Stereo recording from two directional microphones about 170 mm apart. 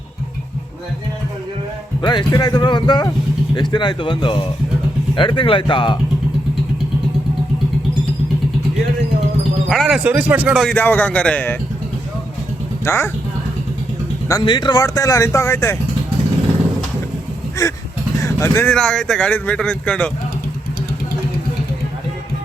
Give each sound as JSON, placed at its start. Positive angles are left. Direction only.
{"t": 2.0, "sound": "speech", "side_deg": 25}
{"t": 9.6, "sound": "a man's voice", "side_deg": 0}
{"t": 12.8, "sound": "speech", "side_deg": 15}
{"t": 14.3, "sound": "speech", "side_deg": 25}
{"t": 17.6, "sound": "vehicle", "side_deg": 20}
{"t": 18.7, "sound": "a man's voice", "side_deg": 5}